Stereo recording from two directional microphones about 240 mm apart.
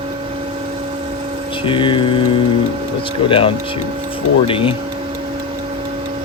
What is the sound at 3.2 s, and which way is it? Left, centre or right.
Speech, left.